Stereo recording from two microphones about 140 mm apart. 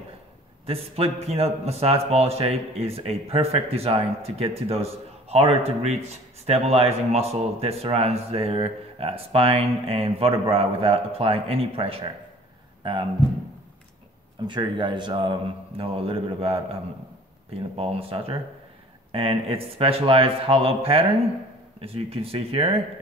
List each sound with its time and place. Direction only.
0.7 s a man's voice: 45° right (ahead or behind)
14.5 s a man's voice: 35° right (ahead or behind)
17.6 s a man's voice: 45° right (ahead or behind)